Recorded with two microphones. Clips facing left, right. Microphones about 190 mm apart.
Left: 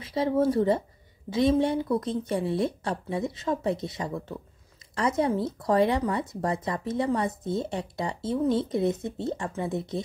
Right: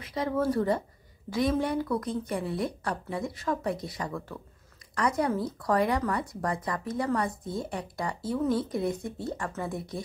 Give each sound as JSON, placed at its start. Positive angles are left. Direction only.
{"t": 0.0, "sound": "speech", "side_deg": 30}